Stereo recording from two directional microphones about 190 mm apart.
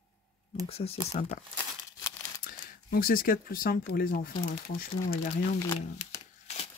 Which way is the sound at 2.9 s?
50° left (ahead or behind).